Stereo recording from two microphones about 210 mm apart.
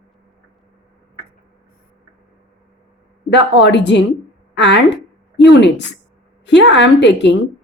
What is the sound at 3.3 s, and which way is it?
A woman's voice, 55° left (ahead or behind).